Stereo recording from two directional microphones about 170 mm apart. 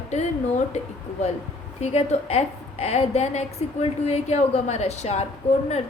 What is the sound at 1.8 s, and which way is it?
A woman's voice, 40° left (ahead or behind).